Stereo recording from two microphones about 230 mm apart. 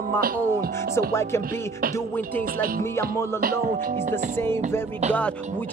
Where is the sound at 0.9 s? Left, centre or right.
Centre.